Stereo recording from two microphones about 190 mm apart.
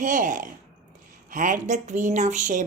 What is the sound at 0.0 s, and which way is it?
A woman's voice, 40° right (ahead or behind).